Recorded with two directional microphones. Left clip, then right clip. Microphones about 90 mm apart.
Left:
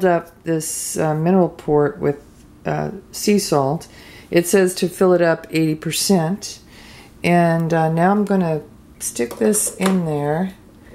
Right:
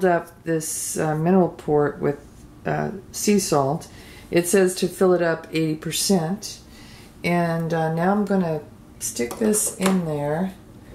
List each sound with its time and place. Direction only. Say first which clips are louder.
0.5 s speech: left 3 dB; 25° left (ahead or behind)